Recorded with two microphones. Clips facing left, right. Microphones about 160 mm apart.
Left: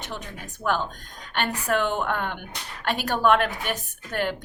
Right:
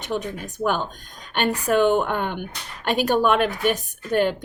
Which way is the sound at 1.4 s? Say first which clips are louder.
Right 5 dB; 20° right (ahead or behind).